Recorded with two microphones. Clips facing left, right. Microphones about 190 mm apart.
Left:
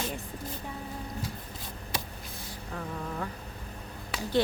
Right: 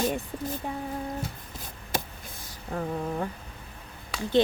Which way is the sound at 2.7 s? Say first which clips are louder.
Right 7 dB; 40° right (ahead or behind).